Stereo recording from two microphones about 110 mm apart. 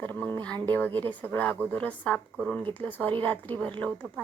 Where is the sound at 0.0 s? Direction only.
15° left (ahead or behind).